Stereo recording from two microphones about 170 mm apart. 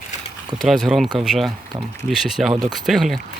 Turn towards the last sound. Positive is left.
turn(degrees=0)  # may be behind; listen again after turning